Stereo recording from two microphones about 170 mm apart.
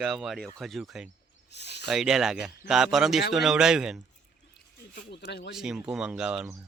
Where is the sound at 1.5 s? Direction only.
85° left.